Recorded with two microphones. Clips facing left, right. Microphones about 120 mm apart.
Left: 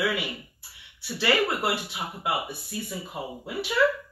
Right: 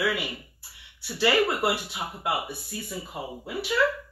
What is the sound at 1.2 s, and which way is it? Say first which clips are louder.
Speech: right 2 dB; 10° right (ahead or behind).